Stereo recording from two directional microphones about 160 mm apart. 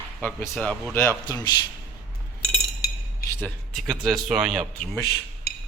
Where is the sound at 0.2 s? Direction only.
5° left (ahead or behind).